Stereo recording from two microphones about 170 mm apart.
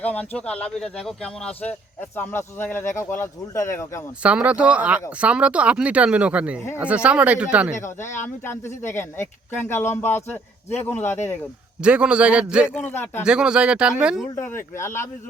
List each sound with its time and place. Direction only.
0.0 s a man's voice: 10° left (ahead or behind)
4.2 s speech: 5° right (ahead or behind)
7.8 s a man's voice: 15° left (ahead or behind)
11.8 s speech: 5° right (ahead or behind)
12.9 s a man's voice: 15° left (ahead or behind)
13.2 s speech: 5° right (ahead or behind)
14.3 s a man's voice: 15° left (ahead or behind)